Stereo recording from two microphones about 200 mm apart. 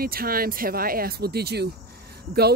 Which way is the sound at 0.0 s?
45° right (ahead or behind).